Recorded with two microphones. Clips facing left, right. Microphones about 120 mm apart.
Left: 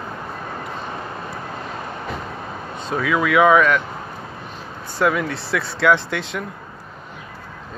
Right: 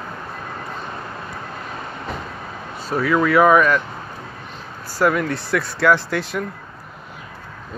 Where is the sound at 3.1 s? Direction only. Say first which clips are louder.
Right 1 dB; centre (ahead or behind).